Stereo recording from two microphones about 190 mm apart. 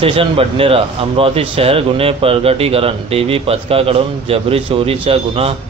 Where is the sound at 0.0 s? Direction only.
30° right (ahead or behind).